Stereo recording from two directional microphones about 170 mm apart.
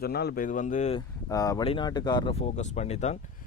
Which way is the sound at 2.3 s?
40° left (ahead or behind).